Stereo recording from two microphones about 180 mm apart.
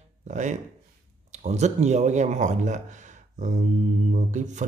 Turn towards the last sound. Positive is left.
turn(degrees=-40)  # may be behind; listen again after turning